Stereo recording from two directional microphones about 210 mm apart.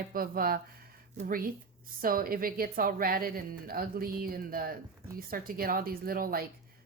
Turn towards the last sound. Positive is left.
turn(degrees=-45)  # may be behind; listen again after turning